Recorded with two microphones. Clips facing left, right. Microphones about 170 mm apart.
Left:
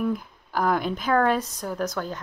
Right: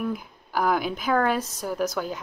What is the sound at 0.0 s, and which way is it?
Speech, 5° right (ahead or behind).